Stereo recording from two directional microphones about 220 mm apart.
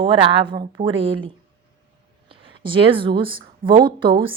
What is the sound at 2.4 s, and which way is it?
A woman's voice, 25° right (ahead or behind).